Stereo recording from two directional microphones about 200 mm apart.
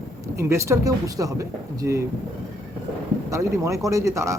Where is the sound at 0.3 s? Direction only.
15° right (ahead or behind).